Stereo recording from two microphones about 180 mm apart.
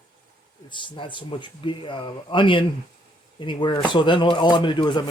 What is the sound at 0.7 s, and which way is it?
Speech, 25° left (ahead or behind).